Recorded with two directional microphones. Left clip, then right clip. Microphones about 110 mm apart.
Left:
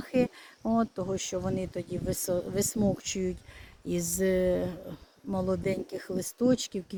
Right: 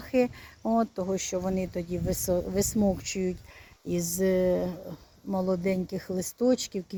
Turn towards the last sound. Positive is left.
turn(degrees=0)  # may be behind; listen again after turning